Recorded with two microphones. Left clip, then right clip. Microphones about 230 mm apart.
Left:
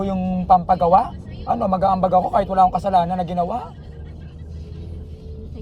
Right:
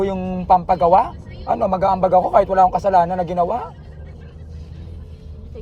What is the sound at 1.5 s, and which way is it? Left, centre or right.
Speech, left.